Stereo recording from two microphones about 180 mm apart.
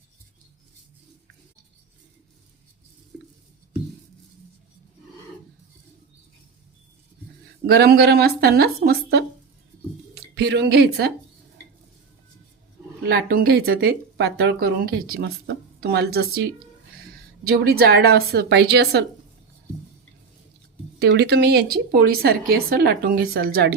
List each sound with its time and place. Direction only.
3.1 s a sound: 10° right (ahead or behind)
7.7 s speech: 65° right (ahead or behind)
13.0 s speech: 60° right (ahead or behind)
21.0 s speech: 70° right (ahead or behind)